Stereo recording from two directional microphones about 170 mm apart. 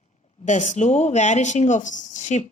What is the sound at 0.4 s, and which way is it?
Speech, 45° left (ahead or behind).